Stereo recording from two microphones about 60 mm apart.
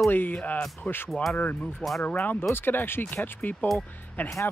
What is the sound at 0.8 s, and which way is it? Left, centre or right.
Speech, left.